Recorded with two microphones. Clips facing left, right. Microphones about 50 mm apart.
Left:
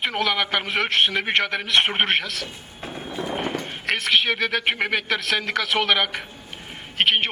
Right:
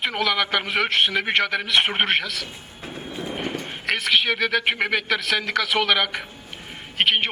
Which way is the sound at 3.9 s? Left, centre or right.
Centre.